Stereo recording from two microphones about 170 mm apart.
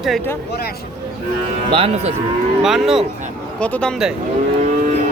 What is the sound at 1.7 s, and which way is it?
Speech, 35° right (ahead or behind).